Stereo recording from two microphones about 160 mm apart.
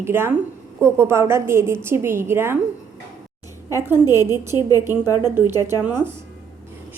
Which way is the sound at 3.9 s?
15° right (ahead or behind).